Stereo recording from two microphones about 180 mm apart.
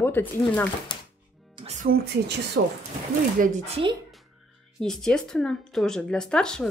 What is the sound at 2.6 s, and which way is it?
Speech, 90° right.